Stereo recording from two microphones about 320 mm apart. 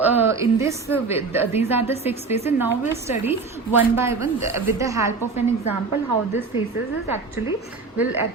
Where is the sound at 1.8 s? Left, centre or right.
Centre.